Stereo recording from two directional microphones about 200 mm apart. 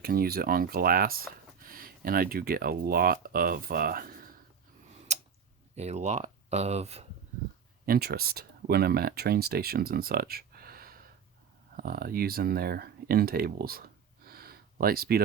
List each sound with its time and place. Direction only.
0.0 s speech: 45° right (ahead or behind)
5.1 s a sound: 35° right (ahead or behind)
5.7 s speech: 35° right (ahead or behind)
7.9 s speech: 50° right (ahead or behind)